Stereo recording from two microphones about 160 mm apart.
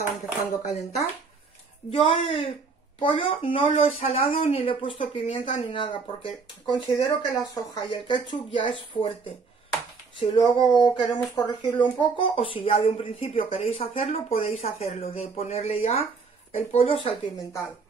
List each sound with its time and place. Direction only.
0.6 s speech: 45° left (ahead or behind)
1.9 s speech: 35° left (ahead or behind)